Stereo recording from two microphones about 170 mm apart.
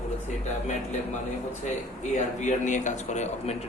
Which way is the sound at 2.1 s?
45° left (ahead or behind).